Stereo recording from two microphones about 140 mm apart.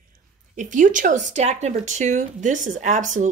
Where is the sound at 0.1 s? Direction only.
65° right (ahead or behind).